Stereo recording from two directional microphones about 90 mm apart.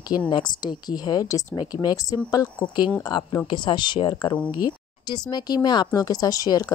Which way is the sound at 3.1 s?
60° left (ahead or behind).